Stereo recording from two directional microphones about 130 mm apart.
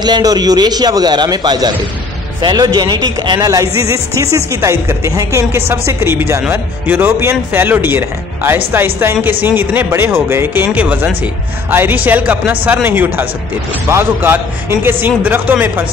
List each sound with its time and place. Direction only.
0.0 s a man's voice: 30° right (ahead or behind); by 15.8 s 15° right (ahead or behind)